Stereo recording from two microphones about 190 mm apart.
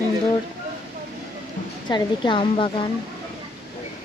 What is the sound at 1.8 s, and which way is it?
A woman's voice, 25° left (ahead or behind).